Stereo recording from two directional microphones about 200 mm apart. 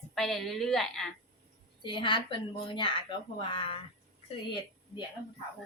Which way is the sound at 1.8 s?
25° left (ahead or behind).